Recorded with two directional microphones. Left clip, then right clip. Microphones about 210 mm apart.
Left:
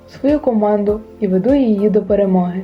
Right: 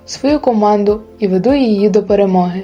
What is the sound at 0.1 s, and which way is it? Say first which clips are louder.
Speech: right 2 dB; 30° right (ahead or behind).